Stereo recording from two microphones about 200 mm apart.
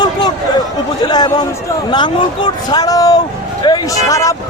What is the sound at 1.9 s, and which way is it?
A man's voice, 20° left (ahead or behind).